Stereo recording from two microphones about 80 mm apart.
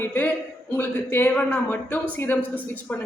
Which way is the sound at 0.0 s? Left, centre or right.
Left.